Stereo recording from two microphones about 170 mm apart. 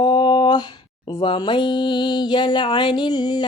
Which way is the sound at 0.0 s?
30° left (ahead or behind).